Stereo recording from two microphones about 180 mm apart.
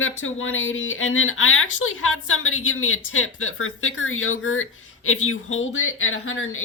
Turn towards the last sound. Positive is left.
turn(degrees=90)